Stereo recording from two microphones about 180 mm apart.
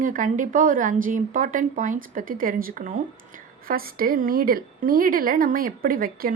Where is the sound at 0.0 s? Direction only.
45° right (ahead or behind).